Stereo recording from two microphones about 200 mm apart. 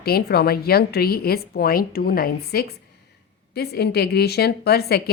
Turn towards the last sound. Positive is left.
turn(degrees=50)  # may be behind; listen again after turning